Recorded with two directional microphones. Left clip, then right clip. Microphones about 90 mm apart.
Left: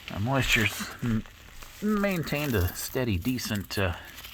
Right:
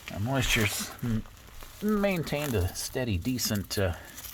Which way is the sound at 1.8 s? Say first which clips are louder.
Even; 25° left (ahead or behind).